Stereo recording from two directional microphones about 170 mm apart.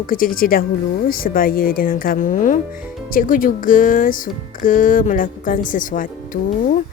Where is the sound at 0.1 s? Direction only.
55° left (ahead or behind).